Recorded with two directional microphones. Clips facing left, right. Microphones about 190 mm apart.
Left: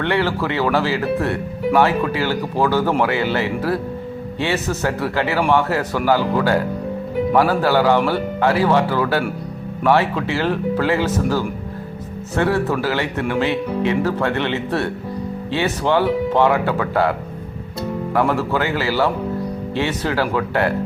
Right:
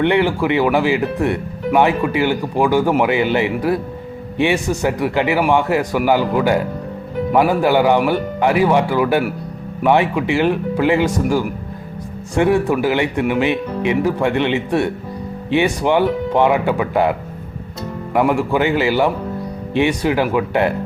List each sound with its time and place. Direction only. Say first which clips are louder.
0.0 s speech: right 4 dB; 15° right (ahead or behind)